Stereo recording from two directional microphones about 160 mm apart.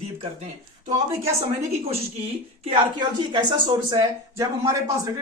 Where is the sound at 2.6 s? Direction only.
30° right (ahead or behind).